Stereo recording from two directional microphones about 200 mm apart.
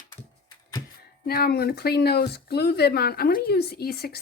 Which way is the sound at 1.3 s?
50° left (ahead or behind).